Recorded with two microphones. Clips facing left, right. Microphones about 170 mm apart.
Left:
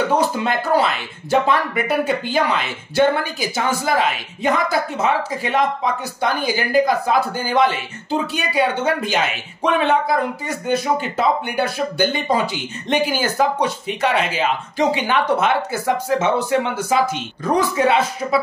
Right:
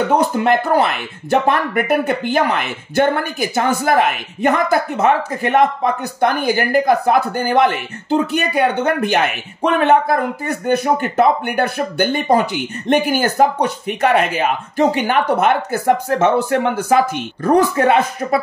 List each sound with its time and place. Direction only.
0.1 s speech: 55° right (ahead or behind)